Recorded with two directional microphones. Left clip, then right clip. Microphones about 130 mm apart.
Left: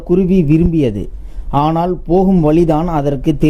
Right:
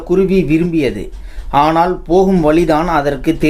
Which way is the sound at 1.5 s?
55° left (ahead or behind).